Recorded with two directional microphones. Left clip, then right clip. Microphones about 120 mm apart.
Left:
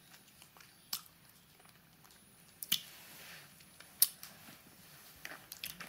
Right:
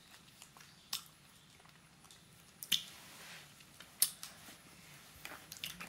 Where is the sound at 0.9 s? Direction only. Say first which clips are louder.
Right 1 dB; 30° left (ahead or behind).